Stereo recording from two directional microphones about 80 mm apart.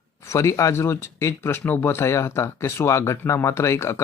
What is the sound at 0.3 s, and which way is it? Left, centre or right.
Speech, left.